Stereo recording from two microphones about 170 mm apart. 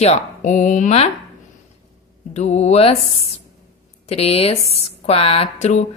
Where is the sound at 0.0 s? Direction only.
40° left (ahead or behind).